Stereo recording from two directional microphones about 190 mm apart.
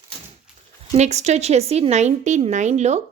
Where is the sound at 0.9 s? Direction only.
35° right (ahead or behind).